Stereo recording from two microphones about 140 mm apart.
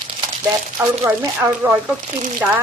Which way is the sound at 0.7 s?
20° right (ahead or behind).